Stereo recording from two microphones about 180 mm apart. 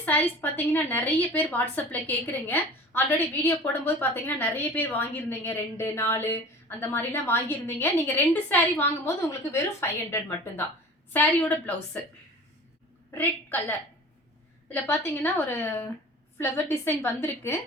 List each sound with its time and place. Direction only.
0.0 s speech: 10° left (ahead or behind)
13.1 s a woman's voice: 10° left (ahead or behind)